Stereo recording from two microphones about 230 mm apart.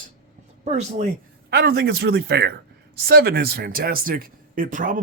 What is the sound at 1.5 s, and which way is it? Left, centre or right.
Speech, right.